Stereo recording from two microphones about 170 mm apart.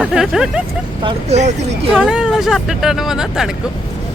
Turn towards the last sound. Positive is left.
turn(degrees=0)  # may be behind; listen again after turning